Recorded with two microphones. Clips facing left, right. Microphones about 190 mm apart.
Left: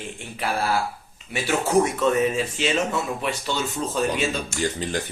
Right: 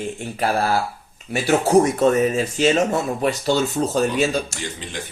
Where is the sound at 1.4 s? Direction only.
40° right (ahead or behind).